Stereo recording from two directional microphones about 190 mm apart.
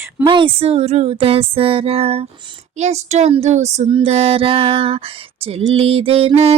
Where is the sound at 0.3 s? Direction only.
25° right (ahead or behind).